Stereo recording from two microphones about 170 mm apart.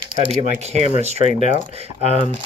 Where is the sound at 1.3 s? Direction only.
45° left (ahead or behind).